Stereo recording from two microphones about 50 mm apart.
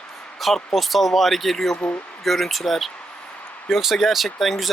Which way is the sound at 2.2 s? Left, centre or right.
Centre.